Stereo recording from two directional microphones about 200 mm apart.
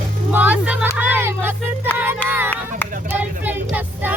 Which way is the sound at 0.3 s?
10° right (ahead or behind).